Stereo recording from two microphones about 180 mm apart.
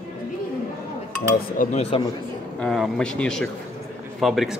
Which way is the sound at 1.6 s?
35° left (ahead or behind).